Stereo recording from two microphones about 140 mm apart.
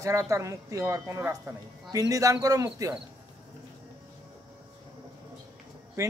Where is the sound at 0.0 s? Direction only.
20° right (ahead or behind).